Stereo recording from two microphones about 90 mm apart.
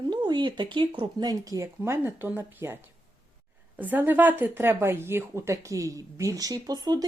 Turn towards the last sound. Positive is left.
turn(degrees=-45)  # may be behind; listen again after turning